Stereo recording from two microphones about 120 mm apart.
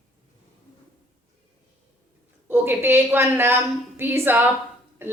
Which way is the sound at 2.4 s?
20° right (ahead or behind).